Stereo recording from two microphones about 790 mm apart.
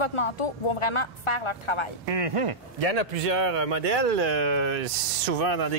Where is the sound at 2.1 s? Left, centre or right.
Right.